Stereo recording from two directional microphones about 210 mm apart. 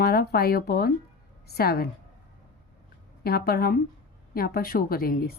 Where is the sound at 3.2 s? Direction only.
45° left (ahead or behind).